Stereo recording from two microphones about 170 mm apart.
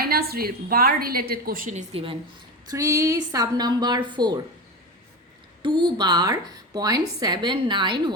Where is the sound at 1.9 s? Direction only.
35° right (ahead or behind).